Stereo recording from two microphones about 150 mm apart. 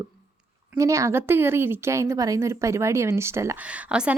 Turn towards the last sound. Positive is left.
turn(degrees=-10)  # may be behind; listen again after turning